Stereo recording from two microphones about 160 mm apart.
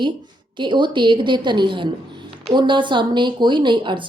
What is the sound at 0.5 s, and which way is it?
Speech, 30° right (ahead or behind).